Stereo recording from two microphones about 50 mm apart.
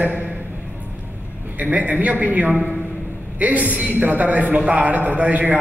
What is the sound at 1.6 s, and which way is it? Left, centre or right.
A woman's voice, right.